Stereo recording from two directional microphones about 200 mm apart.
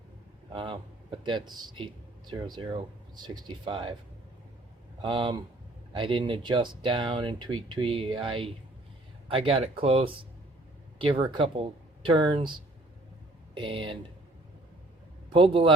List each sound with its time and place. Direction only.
0.5 s speech: 25° right (ahead or behind)
5.0 s speech: 25° right (ahead or behind)
15.3 s speech: 25° right (ahead or behind)